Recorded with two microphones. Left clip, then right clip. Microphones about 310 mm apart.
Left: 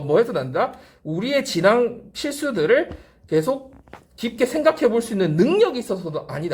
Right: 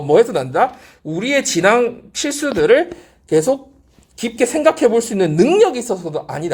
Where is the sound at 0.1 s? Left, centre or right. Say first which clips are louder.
Right 6 dB; centre.